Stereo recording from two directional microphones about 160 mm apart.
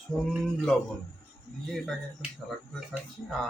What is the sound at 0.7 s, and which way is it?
Speech, 5° left (ahead or behind).